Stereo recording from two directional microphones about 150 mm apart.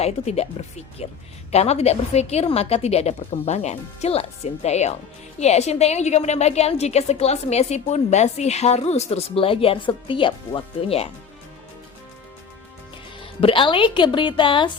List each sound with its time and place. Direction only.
0.0 s a woman's voice: 45° left (ahead or behind)
1.5 s a woman's voice: 45° left (ahead or behind)
13.1 s speech: 35° left (ahead or behind)